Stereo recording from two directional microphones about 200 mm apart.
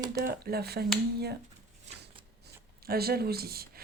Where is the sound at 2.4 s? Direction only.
50° right (ahead or behind).